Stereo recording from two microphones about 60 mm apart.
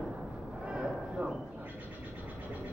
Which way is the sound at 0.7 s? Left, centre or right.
Centre.